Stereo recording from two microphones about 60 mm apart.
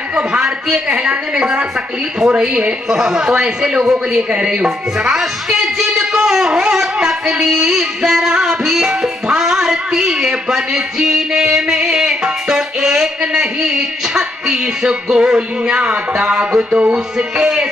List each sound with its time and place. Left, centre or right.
0.7 s speech: centre